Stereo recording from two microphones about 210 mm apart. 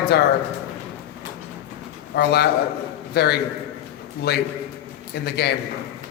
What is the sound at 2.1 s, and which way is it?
A man's voice, 50° left (ahead or behind).